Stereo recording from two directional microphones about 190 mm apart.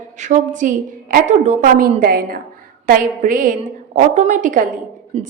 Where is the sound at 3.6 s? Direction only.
35° right (ahead or behind).